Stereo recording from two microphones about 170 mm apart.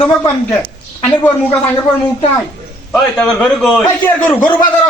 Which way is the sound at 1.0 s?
10° left (ahead or behind).